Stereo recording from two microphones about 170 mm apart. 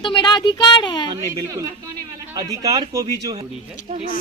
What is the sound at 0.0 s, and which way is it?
Speech, 25° left (ahead or behind).